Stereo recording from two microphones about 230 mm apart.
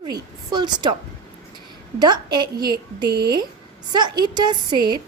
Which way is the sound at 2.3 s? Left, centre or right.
Centre.